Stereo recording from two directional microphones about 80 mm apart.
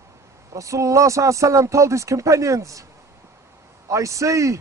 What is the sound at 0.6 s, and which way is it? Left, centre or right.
Speech, right.